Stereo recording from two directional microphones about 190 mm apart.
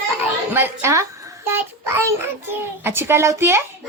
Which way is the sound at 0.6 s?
15° right (ahead or behind).